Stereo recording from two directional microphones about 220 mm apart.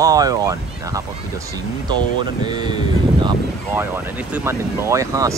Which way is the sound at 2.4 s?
20° right (ahead or behind).